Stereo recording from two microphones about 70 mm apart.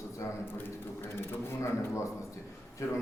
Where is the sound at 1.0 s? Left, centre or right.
Left.